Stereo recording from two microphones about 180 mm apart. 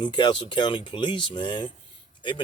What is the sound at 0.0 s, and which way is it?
Speech, 25° left (ahead or behind).